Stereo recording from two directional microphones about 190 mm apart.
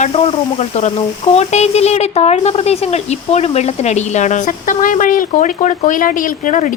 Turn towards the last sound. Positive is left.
turn(degrees=40)  # may be behind; listen again after turning